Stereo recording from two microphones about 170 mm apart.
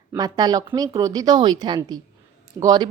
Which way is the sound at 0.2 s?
25° right (ahead or behind).